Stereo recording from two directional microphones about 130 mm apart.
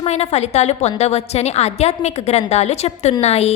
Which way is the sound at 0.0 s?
55° left (ahead or behind).